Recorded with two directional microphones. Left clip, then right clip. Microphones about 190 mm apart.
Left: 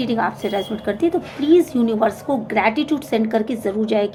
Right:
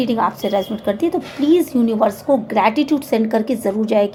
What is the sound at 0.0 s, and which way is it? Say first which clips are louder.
A woman's voice: right 3 dB; 40° right (ahead or behind).